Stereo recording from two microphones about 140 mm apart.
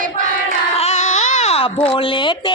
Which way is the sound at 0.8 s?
50° left (ahead or behind).